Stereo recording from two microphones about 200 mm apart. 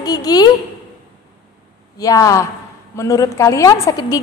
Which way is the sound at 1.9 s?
15° left (ahead or behind).